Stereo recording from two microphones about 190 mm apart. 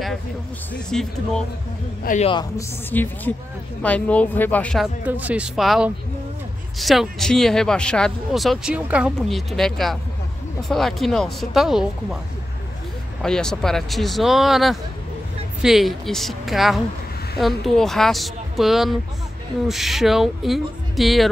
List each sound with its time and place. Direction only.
0.7 s speech: 5° left (ahead or behind)
2.0 s a man's voice: 35° left (ahead or behind)
2.9 s speech: 10° left (ahead or behind)
5.0 s speech: 10° right (ahead or behind)
13.2 s speech: 5° left (ahead or behind)